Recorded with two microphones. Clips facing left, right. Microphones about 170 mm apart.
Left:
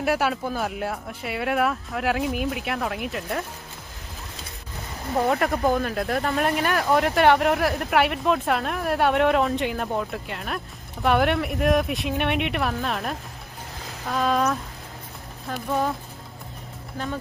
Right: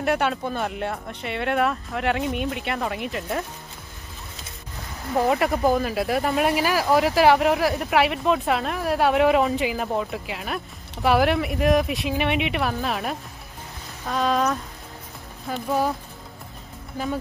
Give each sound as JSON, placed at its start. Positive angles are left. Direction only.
{"t": 0.0, "sound": "speech", "side_deg": 0}
{"t": 5.1, "sound": "speech", "side_deg": 0}
{"t": 17.0, "sound": "speech", "side_deg": -10}